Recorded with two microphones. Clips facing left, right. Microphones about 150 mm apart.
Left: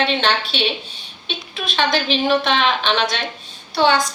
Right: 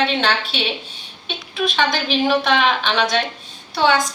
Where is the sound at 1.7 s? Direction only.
5° right (ahead or behind).